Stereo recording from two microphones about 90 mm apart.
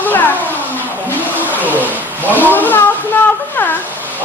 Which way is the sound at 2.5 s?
20° left (ahead or behind).